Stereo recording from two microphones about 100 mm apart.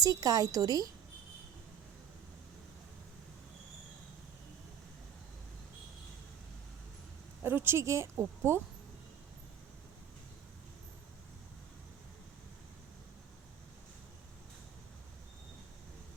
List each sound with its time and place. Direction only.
0.0 s a woman's voice: 35° right (ahead or behind)
7.4 s a woman's voice: 20° right (ahead or behind)